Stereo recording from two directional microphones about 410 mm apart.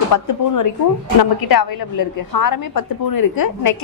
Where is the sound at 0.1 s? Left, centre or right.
Left.